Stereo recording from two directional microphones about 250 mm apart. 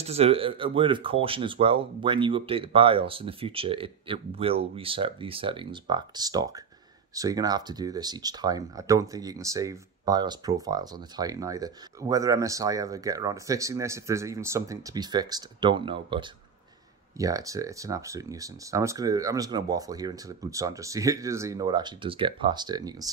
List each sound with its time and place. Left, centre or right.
0.0 s speech: right